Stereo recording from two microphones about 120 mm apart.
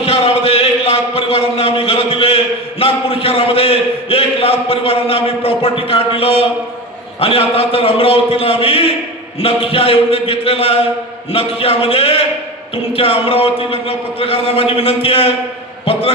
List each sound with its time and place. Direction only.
0.0 s a man's voice: 55° left (ahead or behind)